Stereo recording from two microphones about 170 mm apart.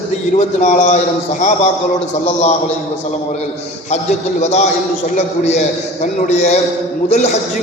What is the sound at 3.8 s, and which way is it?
A man's voice, 40° left (ahead or behind).